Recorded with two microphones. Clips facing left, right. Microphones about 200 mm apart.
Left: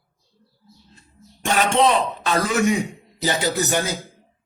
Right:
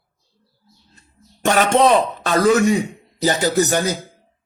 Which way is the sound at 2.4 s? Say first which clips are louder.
Right 7 dB; 35° right (ahead or behind).